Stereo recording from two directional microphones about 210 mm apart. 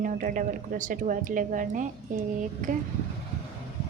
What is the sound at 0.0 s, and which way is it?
A woman's voice, 40° right (ahead or behind).